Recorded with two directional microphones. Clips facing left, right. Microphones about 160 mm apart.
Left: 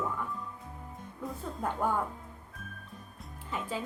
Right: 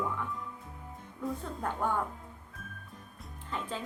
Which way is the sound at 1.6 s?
5° left (ahead or behind).